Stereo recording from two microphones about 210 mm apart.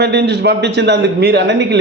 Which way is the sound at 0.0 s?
55° right (ahead or behind).